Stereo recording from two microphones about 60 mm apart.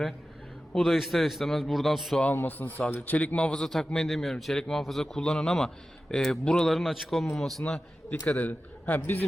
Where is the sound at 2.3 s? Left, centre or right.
Left.